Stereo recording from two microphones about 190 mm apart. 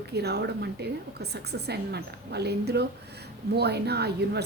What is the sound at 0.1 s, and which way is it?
A woman's voice, 60° right (ahead or behind).